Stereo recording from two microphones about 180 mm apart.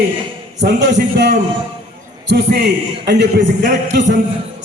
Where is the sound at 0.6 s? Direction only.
70° right (ahead or behind).